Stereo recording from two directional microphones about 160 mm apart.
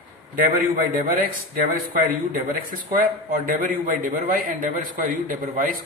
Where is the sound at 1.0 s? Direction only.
65° right (ahead or behind).